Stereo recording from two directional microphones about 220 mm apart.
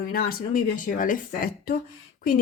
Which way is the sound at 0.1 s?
40° left (ahead or behind).